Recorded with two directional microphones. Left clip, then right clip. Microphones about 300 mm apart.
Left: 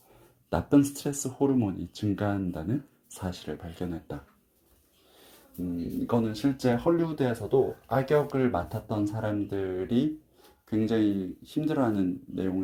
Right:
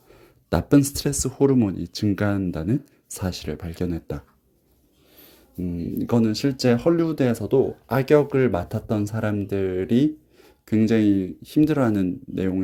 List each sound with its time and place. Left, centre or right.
0.5 s speech: right
6.1 s speech: right